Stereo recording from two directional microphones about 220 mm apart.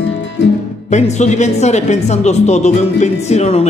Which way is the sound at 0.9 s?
30° left (ahead or behind).